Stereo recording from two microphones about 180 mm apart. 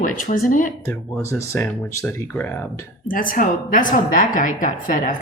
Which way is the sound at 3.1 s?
50° left (ahead or behind).